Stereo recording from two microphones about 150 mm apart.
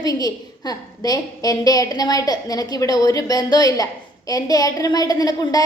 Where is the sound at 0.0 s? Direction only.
25° left (ahead or behind).